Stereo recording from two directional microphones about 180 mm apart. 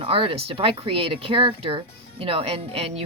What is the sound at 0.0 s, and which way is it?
Speech, 30° right (ahead or behind).